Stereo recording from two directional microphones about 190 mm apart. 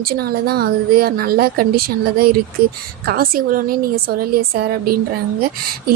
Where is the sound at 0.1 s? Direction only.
55° right (ahead or behind).